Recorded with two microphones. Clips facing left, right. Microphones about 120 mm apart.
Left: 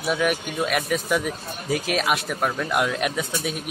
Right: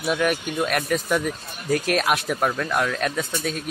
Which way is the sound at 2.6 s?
15° left (ahead or behind).